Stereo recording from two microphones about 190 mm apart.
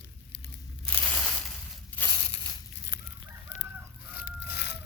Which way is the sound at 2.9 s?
65° left (ahead or behind).